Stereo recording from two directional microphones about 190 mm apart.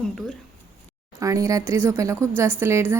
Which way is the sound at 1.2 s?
15° right (ahead or behind).